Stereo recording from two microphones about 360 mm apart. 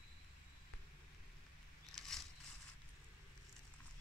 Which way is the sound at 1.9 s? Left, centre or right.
Centre.